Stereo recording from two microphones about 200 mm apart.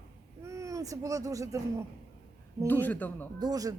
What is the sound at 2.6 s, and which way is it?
Speech, 10° left (ahead or behind).